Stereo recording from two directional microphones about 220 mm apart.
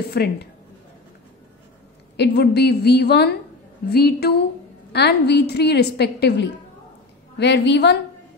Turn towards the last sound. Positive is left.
turn(degrees=50)  # may be behind; listen again after turning